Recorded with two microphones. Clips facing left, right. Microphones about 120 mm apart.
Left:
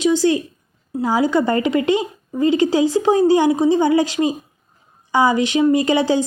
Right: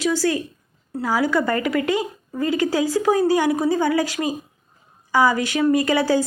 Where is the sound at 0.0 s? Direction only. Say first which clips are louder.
Left 5 dB; 20° left (ahead or behind).